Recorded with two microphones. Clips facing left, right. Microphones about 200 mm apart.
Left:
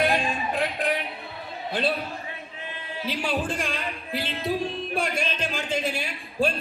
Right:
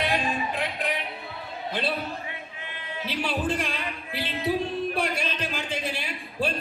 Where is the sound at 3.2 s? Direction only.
50° left (ahead or behind).